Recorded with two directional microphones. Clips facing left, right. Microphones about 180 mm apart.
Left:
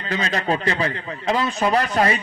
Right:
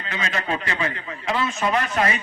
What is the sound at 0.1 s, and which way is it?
A man's voice, 35° left (ahead or behind).